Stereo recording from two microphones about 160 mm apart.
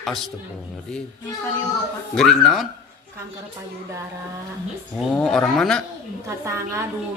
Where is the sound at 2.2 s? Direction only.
5° left (ahead or behind).